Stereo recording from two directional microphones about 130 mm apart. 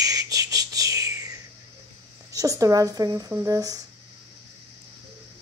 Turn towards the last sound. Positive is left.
turn(degrees=-30)  # may be behind; listen again after turning